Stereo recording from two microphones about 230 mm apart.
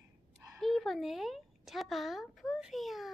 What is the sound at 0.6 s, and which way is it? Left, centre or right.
Speech, centre.